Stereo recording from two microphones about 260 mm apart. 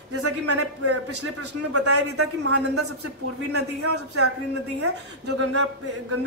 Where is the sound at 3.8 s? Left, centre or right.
Right.